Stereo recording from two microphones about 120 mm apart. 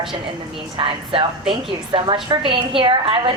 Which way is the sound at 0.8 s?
45° right (ahead or behind).